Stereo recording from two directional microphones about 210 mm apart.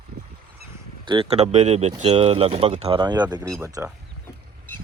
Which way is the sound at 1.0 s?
25° right (ahead or behind).